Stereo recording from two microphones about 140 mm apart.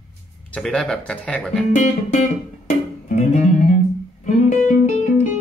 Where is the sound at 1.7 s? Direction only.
60° left (ahead or behind).